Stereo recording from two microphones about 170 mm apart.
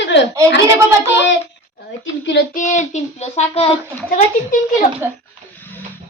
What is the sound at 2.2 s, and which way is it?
Speech, 90° left.